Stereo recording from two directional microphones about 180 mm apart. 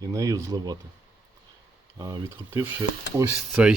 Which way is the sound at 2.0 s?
20° right (ahead or behind).